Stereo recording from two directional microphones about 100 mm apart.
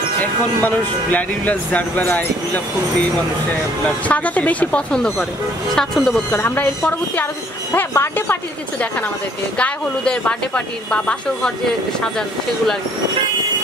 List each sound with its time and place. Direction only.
0.2 s speech: 15° left (ahead or behind)
3.8 s a woman's voice: 15° left (ahead or behind)
6.3 s a woman's voice: 20° left (ahead or behind)
9.6 s speech: 10° left (ahead or behind)